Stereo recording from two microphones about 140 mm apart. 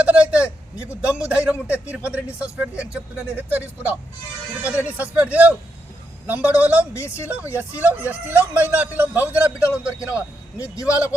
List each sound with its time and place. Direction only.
0.0 s a man's voice: 10° right (ahead or behind)
6.9 s a man's voice: 20° left (ahead or behind)
7.5 s a man's voice: 15° right (ahead or behind)
10.6 s a man's voice: 25° left (ahead or behind)